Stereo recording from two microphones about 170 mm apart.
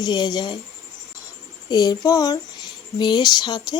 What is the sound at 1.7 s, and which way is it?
Speech, 25° left (ahead or behind).